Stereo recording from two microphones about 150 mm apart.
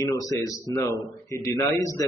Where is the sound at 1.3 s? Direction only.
20° left (ahead or behind).